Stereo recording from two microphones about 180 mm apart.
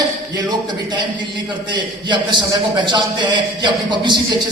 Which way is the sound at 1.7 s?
25° right (ahead or behind).